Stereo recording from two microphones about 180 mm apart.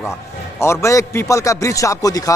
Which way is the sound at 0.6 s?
15° left (ahead or behind).